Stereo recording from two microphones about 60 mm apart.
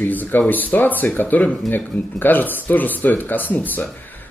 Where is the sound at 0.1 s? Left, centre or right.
Left.